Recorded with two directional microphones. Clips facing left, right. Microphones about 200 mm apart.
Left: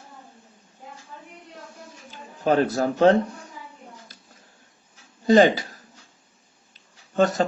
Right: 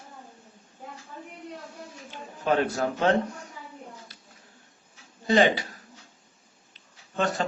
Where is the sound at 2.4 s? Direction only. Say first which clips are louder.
Left 4 dB; 35° left (ahead or behind).